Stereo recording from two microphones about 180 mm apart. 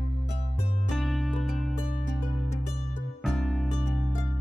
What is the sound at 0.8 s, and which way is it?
Music, centre (ahead or behind).